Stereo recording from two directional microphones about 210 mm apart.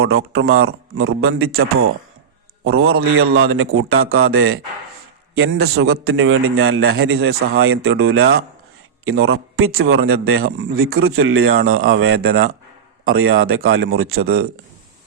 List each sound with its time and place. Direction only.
0.0 s a man's voice: 75° right (ahead or behind); by 8.4 s 55° right (ahead or behind)
9.0 s a man's voice: 80° right